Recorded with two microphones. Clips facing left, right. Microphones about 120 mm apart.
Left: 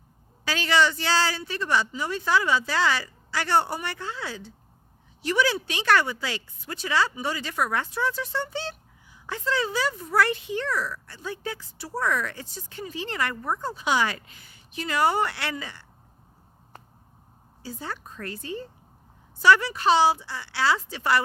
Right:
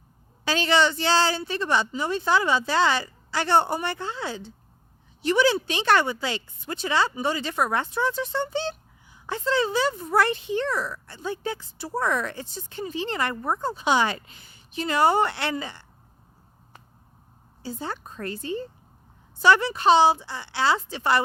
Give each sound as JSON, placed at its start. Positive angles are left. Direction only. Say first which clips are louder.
{"t": 0.4, "sound": "speech", "louder": "right 1 dB", "side_deg": -25}
{"t": 17.6, "sound": "speech", "louder": "right 3 dB", "side_deg": -25}